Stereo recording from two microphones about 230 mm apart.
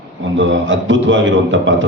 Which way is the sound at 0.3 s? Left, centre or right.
Right.